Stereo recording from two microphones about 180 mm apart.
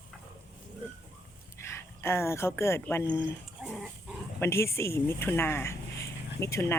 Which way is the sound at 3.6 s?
Centre (ahead or behind).